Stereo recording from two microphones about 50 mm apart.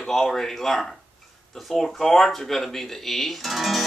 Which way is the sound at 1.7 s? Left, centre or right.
Centre.